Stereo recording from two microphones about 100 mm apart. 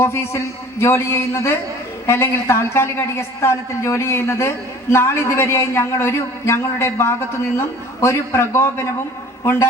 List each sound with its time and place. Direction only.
0.0 s a woman's voice: 25° left (ahead or behind)